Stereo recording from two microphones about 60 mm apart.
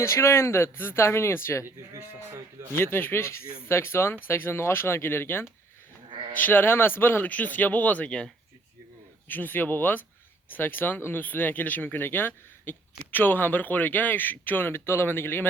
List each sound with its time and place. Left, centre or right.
0.0 s speech: left
1.6 s speech: right
2.7 s speech: left; by 8.3 s centre
9.2 s speech: left